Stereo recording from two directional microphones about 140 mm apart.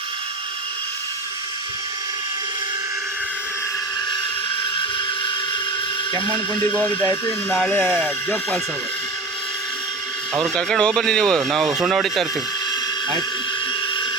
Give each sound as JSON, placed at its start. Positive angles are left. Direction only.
{"t": 6.7, "sound": "speech", "side_deg": 10}
{"t": 10.3, "sound": "speech", "side_deg": 0}